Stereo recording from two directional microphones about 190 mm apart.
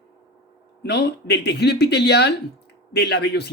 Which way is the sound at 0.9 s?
60° left (ahead or behind).